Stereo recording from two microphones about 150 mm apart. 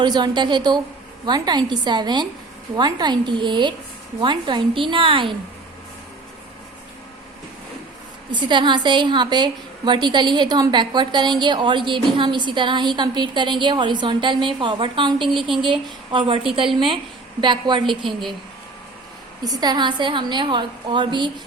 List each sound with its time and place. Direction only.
0.0 s a woman's voice: 30° right (ahead or behind)
8.3 s a woman's voice: 30° right (ahead or behind)
18.0 s a woman's voice: centre (ahead or behind)
19.5 s a woman's voice: 25° right (ahead or behind)